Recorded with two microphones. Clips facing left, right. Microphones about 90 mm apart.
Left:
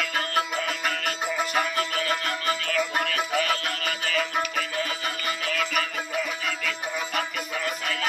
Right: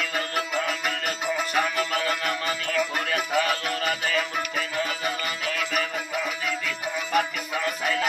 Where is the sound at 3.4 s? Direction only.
35° right (ahead or behind).